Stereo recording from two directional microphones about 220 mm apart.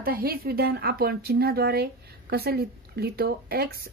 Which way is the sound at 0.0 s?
45° right (ahead or behind).